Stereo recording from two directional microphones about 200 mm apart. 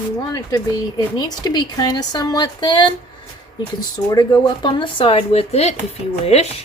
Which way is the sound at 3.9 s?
20° left (ahead or behind).